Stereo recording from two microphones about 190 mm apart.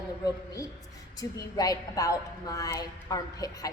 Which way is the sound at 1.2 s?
20° left (ahead or behind).